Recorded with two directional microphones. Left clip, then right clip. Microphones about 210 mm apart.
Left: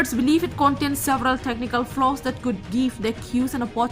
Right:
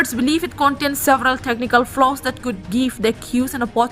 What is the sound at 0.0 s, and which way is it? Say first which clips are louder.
A woman's voice: right 2 dB; 30° right (ahead or behind).